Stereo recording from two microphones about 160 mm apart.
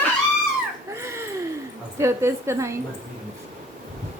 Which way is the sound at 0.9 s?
15° right (ahead or behind).